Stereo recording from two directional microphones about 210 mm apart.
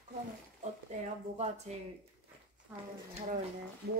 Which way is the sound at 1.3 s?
30° right (ahead or behind).